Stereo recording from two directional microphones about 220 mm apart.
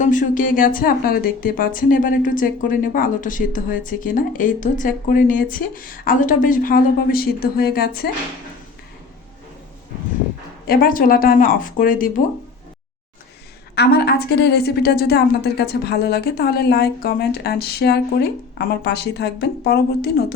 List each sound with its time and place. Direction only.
0.0 s a woman's voice: 35° left (ahead or behind)
10.7 s a woman's voice: 40° left (ahead or behind)
13.7 s a woman's voice: 50° left (ahead or behind)